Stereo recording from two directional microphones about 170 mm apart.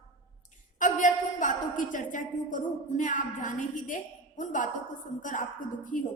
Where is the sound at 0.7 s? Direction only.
50° left (ahead or behind).